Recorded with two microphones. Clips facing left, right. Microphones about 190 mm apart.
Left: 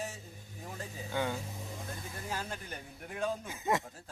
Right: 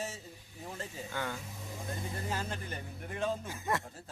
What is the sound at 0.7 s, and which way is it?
Speech, 15° left (ahead or behind).